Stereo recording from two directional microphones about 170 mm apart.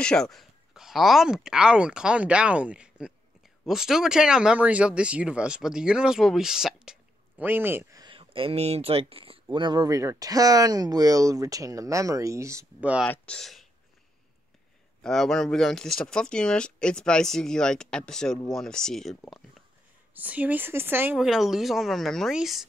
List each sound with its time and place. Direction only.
0.0 s speech: 5° left (ahead or behind); by 12.9 s 15° right (ahead or behind)
13.1 s speech: 5° left (ahead or behind)
15.0 s speech: centre (ahead or behind)
20.2 s speech: 10° right (ahead or behind)